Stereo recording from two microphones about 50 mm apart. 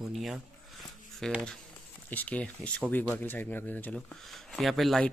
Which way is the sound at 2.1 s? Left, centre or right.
Left.